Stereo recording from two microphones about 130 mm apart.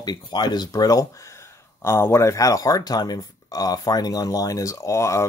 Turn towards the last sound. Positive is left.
turn(degrees=25)  # may be behind; listen again after turning